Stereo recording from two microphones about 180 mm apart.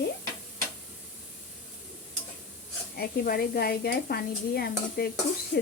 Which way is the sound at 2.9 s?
55° left (ahead or behind).